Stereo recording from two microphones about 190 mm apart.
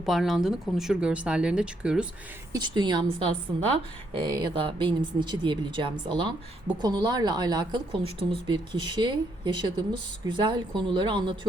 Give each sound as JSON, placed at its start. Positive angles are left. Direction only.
{"t": 0.0, "sound": "speech", "side_deg": 0}
{"t": 2.5, "sound": "speech", "side_deg": -25}